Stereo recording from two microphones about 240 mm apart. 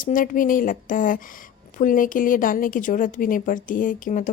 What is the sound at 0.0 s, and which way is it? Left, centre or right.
A woman's voice, left.